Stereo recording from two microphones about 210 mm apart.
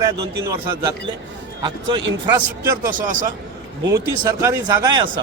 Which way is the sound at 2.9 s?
40° right (ahead or behind).